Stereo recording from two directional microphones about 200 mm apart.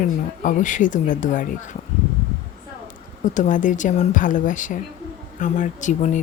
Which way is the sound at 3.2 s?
40° left (ahead or behind).